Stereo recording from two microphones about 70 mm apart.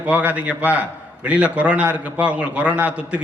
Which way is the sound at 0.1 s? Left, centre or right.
Right.